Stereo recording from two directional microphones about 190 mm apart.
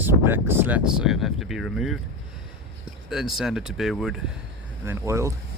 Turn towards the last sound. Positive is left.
turn(degrees=-15)  # may be behind; listen again after turning